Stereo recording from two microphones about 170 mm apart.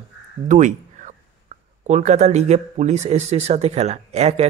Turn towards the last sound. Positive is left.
turn(degrees=-40)  # may be behind; listen again after turning